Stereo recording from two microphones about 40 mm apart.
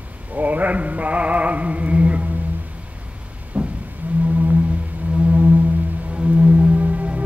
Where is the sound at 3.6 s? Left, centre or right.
Right.